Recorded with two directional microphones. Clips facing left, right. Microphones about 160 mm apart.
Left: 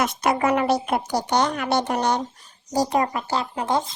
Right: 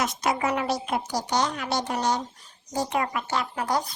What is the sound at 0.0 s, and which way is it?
Speech, 60° left (ahead or behind).